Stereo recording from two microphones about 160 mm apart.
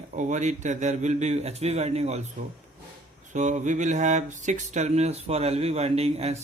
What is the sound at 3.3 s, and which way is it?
A man's voice, 50° right (ahead or behind).